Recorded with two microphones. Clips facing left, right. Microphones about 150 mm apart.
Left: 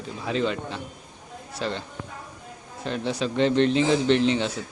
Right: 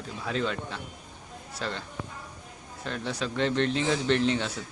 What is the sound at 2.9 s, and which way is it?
Speech, 25° left (ahead or behind).